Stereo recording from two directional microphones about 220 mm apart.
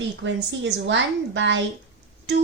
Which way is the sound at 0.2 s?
55° right (ahead or behind).